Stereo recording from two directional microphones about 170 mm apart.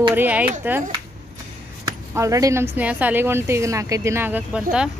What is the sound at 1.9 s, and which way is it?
A woman's voice, 20° right (ahead or behind).